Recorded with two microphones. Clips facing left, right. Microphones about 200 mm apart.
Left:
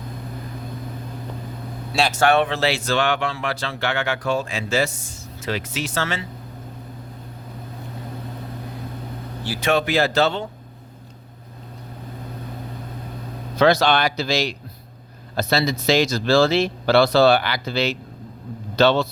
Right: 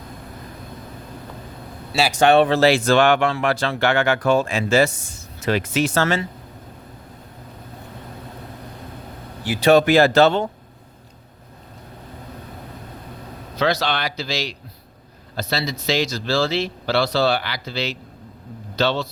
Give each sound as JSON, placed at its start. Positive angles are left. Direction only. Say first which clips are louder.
{"t": 1.9, "sound": "speech", "louder": "right 1 dB", "side_deg": -5}
{"t": 2.1, "sound": "speech", "louder": "right 4 dB", "side_deg": -20}
{"t": 2.4, "sound": "speech", "louder": "right 6 dB", "side_deg": -40}
{"t": 9.6, "sound": "speech", "louder": "right 6 dB", "side_deg": -40}
{"t": 13.6, "sound": "speech", "louder": "left 5 dB", "side_deg": 50}